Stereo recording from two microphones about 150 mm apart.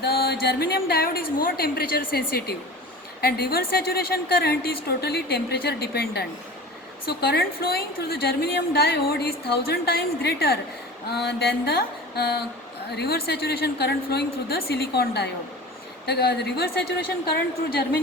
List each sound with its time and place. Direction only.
0.0 s a woman's voice: 90° left